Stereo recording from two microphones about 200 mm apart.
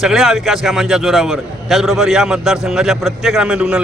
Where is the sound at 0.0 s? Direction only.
Centre (ahead or behind).